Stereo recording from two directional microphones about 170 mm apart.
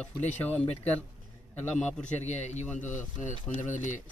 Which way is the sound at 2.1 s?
40° left (ahead or behind).